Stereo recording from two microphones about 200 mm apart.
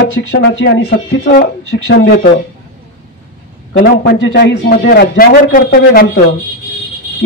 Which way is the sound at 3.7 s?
55° left (ahead or behind).